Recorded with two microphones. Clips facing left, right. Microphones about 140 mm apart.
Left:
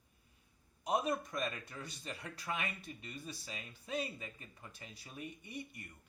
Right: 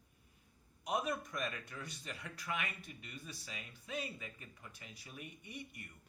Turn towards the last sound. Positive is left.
turn(degrees=30)  # may be behind; listen again after turning